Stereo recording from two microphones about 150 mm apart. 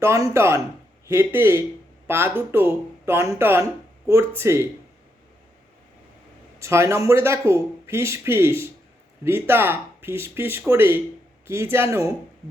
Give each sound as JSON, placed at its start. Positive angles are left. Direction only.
{"t": 0.0, "sound": "speech", "side_deg": -20}
{"t": 6.6, "sound": "speech", "side_deg": -20}